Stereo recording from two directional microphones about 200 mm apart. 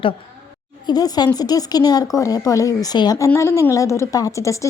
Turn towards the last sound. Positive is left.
turn(degrees=15)  # may be behind; listen again after turning